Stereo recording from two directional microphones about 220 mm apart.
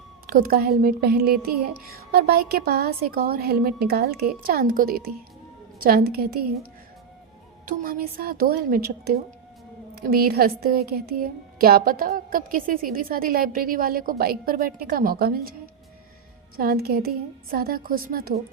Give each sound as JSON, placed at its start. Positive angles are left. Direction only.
{"t": 0.3, "sound": "a woman's voice", "side_deg": -40}
{"t": 7.6, "sound": "a woman's voice", "side_deg": -40}
{"t": 16.6, "sound": "a woman's voice", "side_deg": -45}